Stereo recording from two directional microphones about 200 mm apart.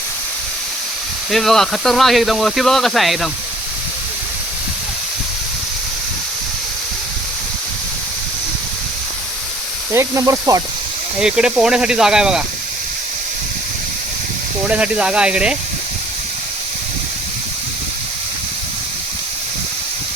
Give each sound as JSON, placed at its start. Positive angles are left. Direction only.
{"t": 1.3, "sound": "speech", "side_deg": 0}
{"t": 9.9, "sound": "speech", "side_deg": -15}
{"t": 11.2, "sound": "speech", "side_deg": -5}
{"t": 14.7, "sound": "speech", "side_deg": -5}